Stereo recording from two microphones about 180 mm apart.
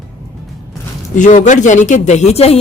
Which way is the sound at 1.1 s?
40° left (ahead or behind).